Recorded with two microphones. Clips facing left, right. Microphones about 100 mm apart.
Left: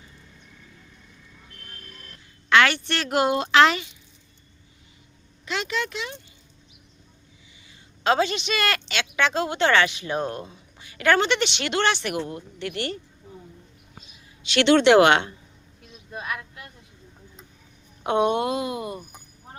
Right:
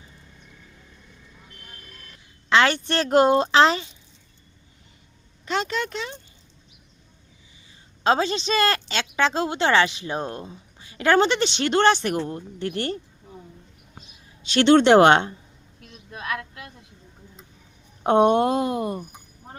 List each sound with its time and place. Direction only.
2.5 s a sound: 30° right (ahead or behind)
2.7 s a woman's voice: 35° right (ahead or behind)
5.5 s a woman's voice: 40° right (ahead or behind)
8.0 s a woman's voice: 30° right (ahead or behind)
14.5 s a woman's voice: 40° right (ahead or behind)
18.0 s speech: 40° right (ahead or behind)